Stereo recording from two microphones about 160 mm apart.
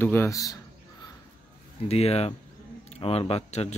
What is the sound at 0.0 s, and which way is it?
Speech, 15° left (ahead or behind).